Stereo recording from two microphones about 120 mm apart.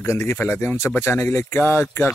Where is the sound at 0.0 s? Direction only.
20° left (ahead or behind).